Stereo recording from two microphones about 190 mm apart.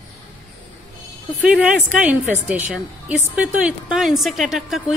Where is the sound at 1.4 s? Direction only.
5° right (ahead or behind).